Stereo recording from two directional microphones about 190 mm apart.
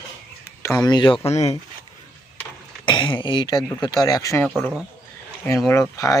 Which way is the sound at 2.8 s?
25° left (ahead or behind).